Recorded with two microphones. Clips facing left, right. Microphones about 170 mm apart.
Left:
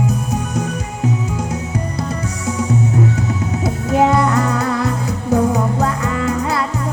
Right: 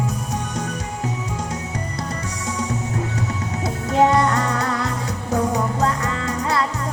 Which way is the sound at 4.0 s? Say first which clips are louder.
Left 1 dB; 25° left (ahead or behind).